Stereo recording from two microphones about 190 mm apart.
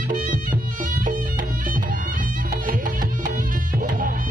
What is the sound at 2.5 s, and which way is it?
Music, 45° right (ahead or behind).